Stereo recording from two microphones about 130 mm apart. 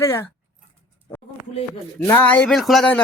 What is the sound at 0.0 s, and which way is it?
Speech, 20° left (ahead or behind).